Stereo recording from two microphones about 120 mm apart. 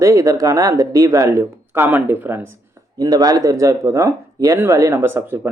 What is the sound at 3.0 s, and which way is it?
Speech, 30° right (ahead or behind).